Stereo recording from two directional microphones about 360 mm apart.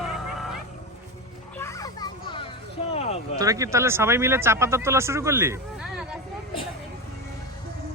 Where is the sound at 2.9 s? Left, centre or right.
Centre.